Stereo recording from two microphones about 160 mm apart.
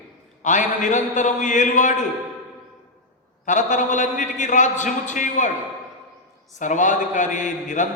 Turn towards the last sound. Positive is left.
turn(degrees=50)  # may be behind; listen again after turning